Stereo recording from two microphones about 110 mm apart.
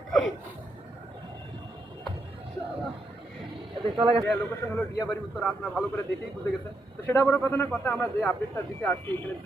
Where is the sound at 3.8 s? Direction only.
60° right (ahead or behind).